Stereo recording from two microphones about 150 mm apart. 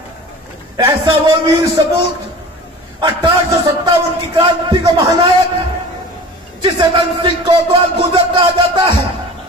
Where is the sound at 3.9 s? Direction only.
30° right (ahead or behind).